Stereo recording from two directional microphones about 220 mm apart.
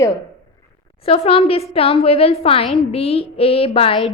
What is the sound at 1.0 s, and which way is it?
A woman's voice, 25° left (ahead or behind).